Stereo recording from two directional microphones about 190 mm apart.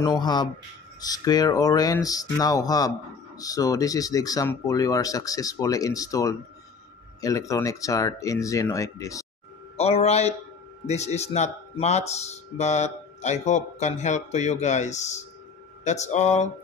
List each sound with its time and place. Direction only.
0.0 s speech: 20° left (ahead or behind)
9.8 s speech: 35° left (ahead or behind)